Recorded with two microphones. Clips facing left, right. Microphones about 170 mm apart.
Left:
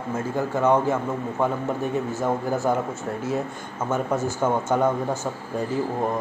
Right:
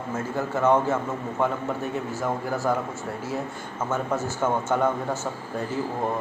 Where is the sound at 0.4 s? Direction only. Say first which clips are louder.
Left 1 dB; 15° left (ahead or behind).